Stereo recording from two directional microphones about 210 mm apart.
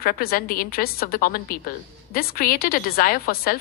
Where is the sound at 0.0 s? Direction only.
45° left (ahead or behind).